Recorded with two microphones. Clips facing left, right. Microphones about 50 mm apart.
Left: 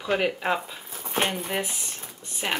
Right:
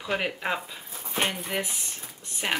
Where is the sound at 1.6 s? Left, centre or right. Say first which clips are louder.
Left 2 dB; centre.